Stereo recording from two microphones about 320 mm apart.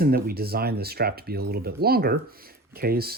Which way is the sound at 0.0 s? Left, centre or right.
Right.